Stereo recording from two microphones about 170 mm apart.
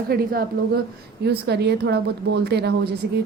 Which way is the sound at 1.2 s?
75° right (ahead or behind).